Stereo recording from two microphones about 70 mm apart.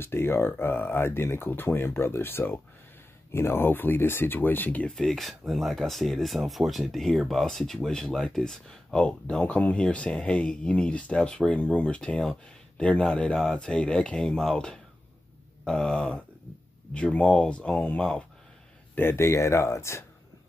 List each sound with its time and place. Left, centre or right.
0.0 s speech: left
4.9 s speech: centre
18.9 s speech: left